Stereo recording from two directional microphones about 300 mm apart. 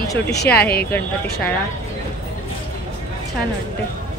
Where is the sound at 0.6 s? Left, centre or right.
Left.